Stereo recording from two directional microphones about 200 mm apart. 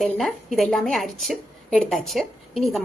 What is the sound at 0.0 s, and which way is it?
A woman's voice, centre (ahead or behind).